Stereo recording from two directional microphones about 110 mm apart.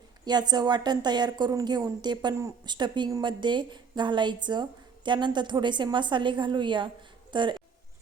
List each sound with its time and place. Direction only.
0.3 s a woman's voice: 40° right (ahead or behind)